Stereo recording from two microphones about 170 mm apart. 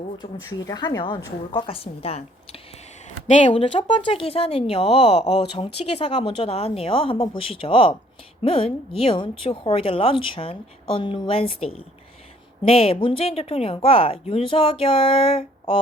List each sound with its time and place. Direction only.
0.2 s a woman's voice: 20° left (ahead or behind)